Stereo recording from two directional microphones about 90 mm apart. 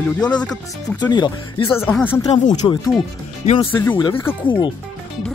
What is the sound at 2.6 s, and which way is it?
Speech, 50° left (ahead or behind).